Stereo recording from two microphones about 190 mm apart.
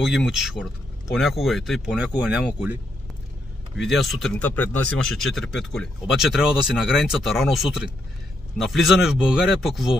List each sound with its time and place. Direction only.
0.1 s speech: centre (ahead or behind)
3.8 s speech: centre (ahead or behind)